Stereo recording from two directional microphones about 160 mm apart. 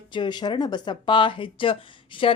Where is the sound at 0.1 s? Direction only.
30° left (ahead or behind).